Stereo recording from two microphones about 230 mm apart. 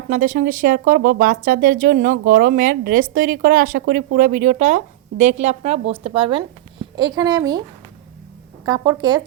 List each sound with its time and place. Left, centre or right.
0.1 s a woman's voice: right; by 7.6 s centre
8.6 s speech: centre